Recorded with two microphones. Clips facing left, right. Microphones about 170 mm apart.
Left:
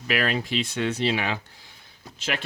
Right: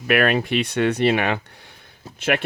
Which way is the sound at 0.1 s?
60° right (ahead or behind).